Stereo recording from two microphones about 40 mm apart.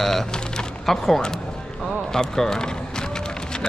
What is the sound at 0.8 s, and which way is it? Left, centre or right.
Speech, centre.